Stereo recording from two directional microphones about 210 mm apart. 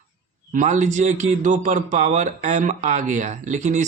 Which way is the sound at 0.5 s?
35° right (ahead or behind).